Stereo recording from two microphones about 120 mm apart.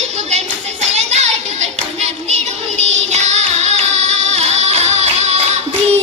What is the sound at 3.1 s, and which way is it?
Music, 70° right (ahead or behind).